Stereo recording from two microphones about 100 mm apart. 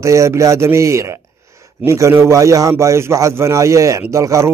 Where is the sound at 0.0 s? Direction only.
30° right (ahead or behind).